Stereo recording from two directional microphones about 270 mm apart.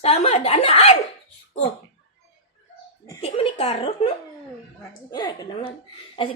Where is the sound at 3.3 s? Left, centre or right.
Left.